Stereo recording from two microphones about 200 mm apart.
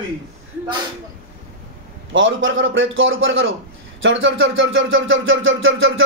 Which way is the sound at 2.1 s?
75° right (ahead or behind).